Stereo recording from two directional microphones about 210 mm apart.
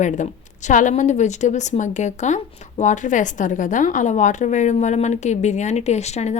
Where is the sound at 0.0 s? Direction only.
35° left (ahead or behind).